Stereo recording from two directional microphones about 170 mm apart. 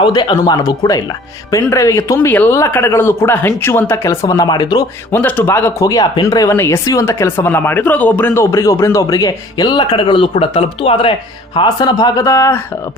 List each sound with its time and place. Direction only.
0.0 s speech: 30° left (ahead or behind)
5.1 s speech: 15° left (ahead or behind)